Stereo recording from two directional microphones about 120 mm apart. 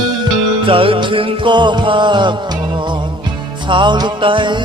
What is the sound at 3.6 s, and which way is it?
Music, 40° right (ahead or behind).